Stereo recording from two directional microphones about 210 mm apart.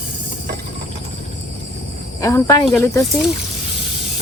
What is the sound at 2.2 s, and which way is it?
Speech, 15° left (ahead or behind).